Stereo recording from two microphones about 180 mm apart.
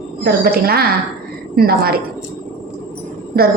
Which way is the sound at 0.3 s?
55° right (ahead or behind).